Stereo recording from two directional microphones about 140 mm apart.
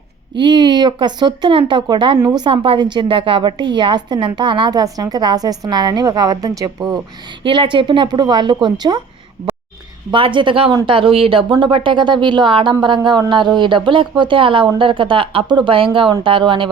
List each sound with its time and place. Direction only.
0.3 s a woman's voice: 35° right (ahead or behind)
7.4 s a woman's voice: 35° right (ahead or behind)
10.1 s a woman's voice: 35° right (ahead or behind)